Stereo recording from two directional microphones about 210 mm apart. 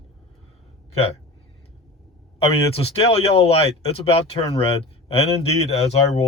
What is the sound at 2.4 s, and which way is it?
Speech, 30° left (ahead or behind).